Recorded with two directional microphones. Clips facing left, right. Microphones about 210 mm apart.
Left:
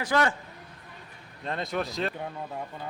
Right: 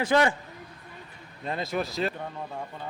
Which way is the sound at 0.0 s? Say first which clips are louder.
Right 3 dB; 20° right (ahead or behind).